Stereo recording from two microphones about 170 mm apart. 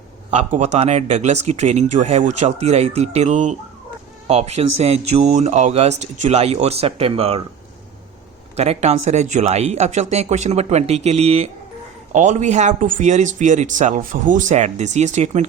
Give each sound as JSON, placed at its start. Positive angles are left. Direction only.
{"t": 0.3, "sound": "speech", "side_deg": -45}
{"t": 8.5, "sound": "speech", "side_deg": -40}